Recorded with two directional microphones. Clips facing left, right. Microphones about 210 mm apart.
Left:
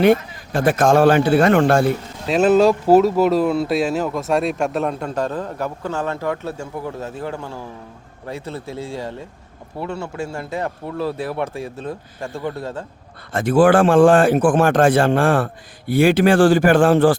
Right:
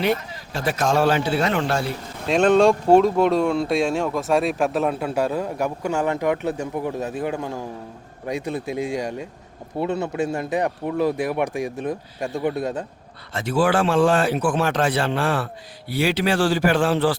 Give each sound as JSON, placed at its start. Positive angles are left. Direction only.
{"t": 0.0, "sound": "a man's voice", "side_deg": 50}
{"t": 2.2, "sound": "speech", "side_deg": 5}
{"t": 13.3, "sound": "a man's voice", "side_deg": 50}